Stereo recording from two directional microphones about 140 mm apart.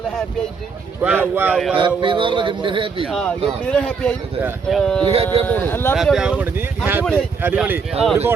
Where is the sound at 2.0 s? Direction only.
35° right (ahead or behind).